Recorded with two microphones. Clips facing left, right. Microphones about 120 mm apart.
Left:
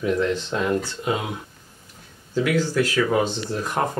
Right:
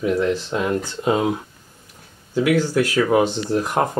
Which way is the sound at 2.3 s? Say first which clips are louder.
Right 3 dB; 15° right (ahead or behind).